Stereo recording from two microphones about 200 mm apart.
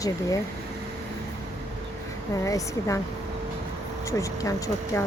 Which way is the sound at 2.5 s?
15° left (ahead or behind).